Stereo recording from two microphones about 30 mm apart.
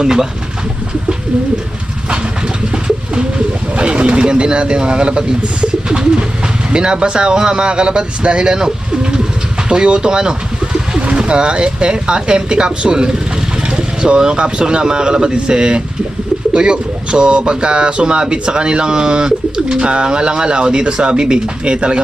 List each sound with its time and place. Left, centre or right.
0.0 s speech: right
2.7 s speech: right
6.7 s speech: right
9.6 s pigeon: right
11.1 s speech: right